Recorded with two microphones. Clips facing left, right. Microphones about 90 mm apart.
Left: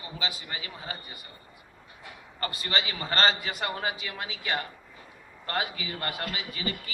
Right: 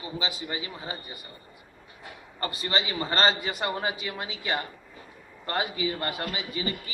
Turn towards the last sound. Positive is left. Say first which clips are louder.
# right 2 dB
turn(degrees=-25)  # may be behind; listen again after turning